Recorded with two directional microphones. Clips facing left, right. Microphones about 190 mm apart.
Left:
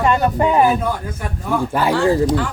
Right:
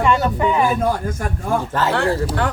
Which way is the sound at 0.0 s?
40° left (ahead or behind).